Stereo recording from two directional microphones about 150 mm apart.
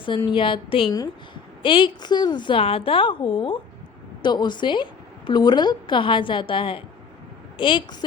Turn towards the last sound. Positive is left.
turn(degrees=35)  # may be behind; listen again after turning